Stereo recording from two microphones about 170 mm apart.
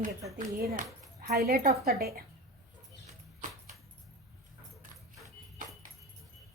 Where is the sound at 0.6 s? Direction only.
65° right (ahead or behind).